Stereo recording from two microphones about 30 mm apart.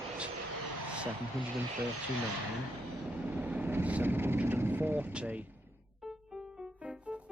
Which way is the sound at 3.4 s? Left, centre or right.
Right.